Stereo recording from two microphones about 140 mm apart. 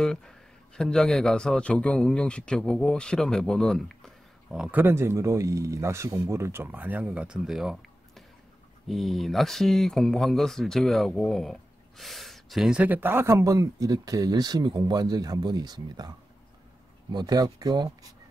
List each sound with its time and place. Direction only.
0.0 s a man's voice: 5° left (ahead or behind)
4.6 s speech: 15° right (ahead or behind)
8.8 s speech: centre (ahead or behind); by 16.1 s 30° right (ahead or behind)
17.1 s speech: 30° right (ahead or behind)